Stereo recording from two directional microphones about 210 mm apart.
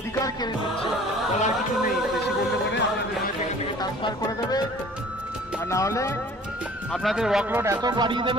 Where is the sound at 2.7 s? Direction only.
55° left (ahead or behind).